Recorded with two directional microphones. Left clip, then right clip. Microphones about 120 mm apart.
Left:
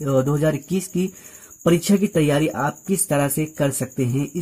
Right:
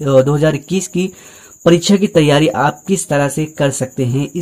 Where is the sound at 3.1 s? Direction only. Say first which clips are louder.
Right 5 dB; 25° left (ahead or behind).